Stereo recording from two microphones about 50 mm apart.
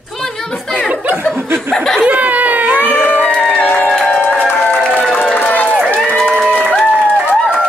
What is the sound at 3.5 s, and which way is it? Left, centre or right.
Music, left.